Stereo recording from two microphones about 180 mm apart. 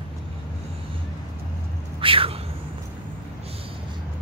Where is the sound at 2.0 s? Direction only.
30° right (ahead or behind).